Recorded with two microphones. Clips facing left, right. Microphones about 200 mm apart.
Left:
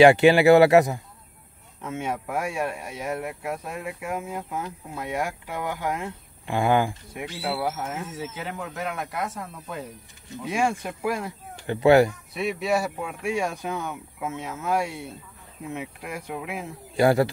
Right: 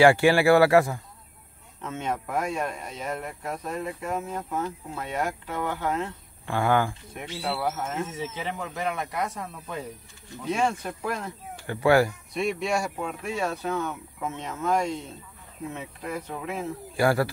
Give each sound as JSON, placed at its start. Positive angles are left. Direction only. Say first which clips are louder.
{"t": 0.0, "sound": "speech", "louder": "left 3 dB", "side_deg": 20}
{"t": 11.5, "sound": "speech", "louder": "left 4 dB", "side_deg": 20}
{"t": 12.4, "sound": "speech", "louder": "left 1 dB", "side_deg": 0}